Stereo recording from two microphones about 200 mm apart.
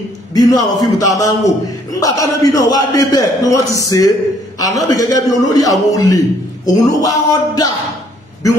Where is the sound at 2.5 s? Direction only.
20° left (ahead or behind).